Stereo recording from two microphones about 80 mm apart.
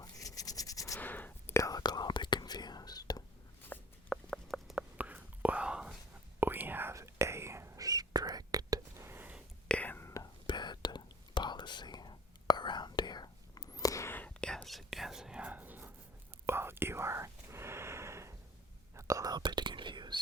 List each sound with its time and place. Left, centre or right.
0.0 s a sound: left
0.9 s a sound: left
1.5 s whispering: left
1.8 s whispering: left
4.1 s a sound: centre
4.9 s whispering: right
6.4 s whispering: right
6.9 s whispering: right
7.8 s whispering: right
9.0 s a sound: right
9.6 s whispering: centre
10.4 s whispering: left
14.1 s whispering: centre; by 19.3 s right
19.3 s whispering: right